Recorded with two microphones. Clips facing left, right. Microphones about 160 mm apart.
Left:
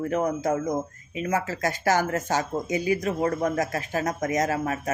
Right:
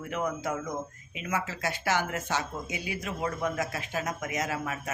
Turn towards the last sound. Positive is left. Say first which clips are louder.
# left 7 dB
turn(degrees=40)  # may be behind; listen again after turning